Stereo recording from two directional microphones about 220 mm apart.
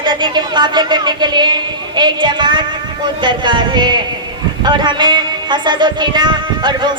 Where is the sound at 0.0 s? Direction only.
20° right (ahead or behind).